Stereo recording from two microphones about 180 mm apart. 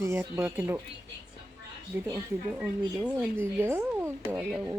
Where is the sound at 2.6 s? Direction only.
10° right (ahead or behind).